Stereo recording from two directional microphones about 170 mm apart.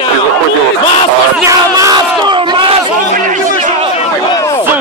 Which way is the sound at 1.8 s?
25° right (ahead or behind).